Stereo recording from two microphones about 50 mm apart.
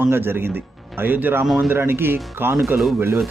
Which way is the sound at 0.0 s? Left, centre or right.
Right.